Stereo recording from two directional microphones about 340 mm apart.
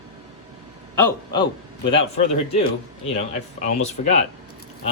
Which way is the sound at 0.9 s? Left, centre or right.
Centre.